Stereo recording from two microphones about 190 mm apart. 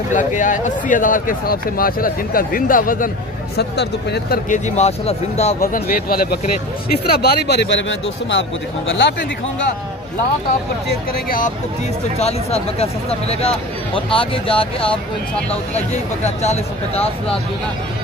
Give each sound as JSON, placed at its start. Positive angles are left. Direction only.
{"t": 0.1, "sound": "speech", "side_deg": 40}
{"t": 3.5, "sound": "speech", "side_deg": 60}
{"t": 4.5, "sound": "speech", "side_deg": 35}
{"t": 5.7, "sound": "a man's voice", "side_deg": 50}
{"t": 11.2, "sound": "speech", "side_deg": 45}
{"t": 12.2, "sound": "speech", "side_deg": 35}
{"t": 16.3, "sound": "speech", "side_deg": 35}